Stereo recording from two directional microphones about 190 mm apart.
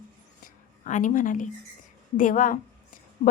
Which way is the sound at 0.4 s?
40° left (ahead or behind).